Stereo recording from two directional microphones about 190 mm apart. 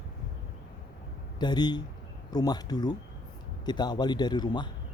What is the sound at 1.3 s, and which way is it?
Speech, 20° left (ahead or behind).